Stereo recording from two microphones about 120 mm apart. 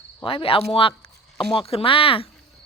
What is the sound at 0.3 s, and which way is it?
Speech, 45° left (ahead or behind).